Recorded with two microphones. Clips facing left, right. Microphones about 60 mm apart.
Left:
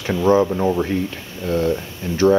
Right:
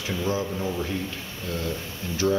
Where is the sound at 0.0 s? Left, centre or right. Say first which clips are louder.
Left 11 dB; left.